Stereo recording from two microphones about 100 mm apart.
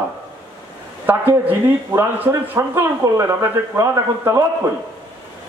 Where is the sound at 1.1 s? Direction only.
20° right (ahead or behind).